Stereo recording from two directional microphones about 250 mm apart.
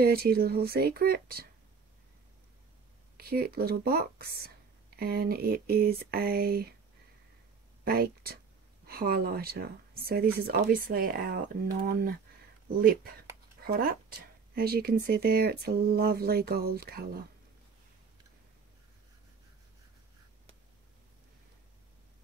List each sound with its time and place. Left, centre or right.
0.0 s speech: right
3.2 s speech: right
7.8 s speech: right